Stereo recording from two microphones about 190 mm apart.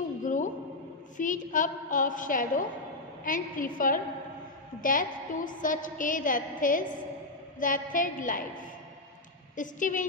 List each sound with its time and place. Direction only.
0.2 s a sound: 45° left (ahead or behind)
1.1 s a woman's voice: 45° left (ahead or behind)
9.6 s a woman's voice: 45° left (ahead or behind)